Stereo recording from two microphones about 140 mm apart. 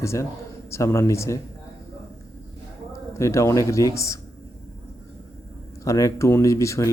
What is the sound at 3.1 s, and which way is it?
Speech, 20° left (ahead or behind).